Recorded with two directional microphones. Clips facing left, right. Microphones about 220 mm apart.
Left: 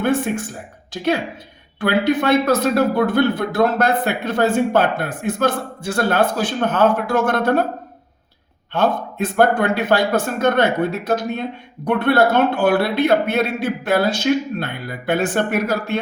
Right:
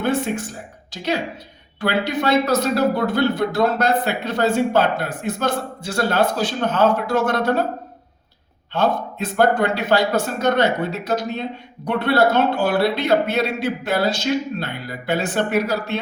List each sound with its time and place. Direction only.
0.0 s speech: 55° left (ahead or behind)
1.8 s speech: 55° left (ahead or behind)
8.7 s speech: 55° left (ahead or behind)